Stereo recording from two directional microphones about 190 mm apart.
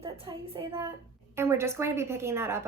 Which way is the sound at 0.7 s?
15° right (ahead or behind).